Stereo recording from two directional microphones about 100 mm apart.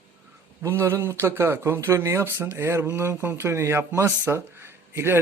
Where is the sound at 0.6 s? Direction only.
30° right (ahead or behind).